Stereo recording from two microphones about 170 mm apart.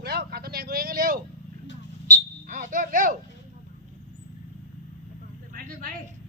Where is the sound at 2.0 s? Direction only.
50° right (ahead or behind).